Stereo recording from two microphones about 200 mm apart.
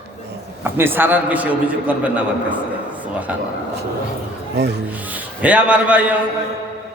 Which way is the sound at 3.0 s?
10° right (ahead or behind).